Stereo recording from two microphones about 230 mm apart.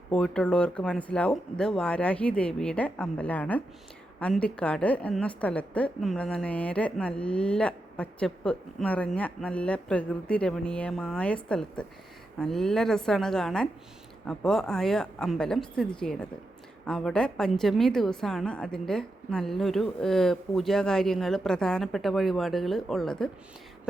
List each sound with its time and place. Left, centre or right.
0.1 s a woman's voice: centre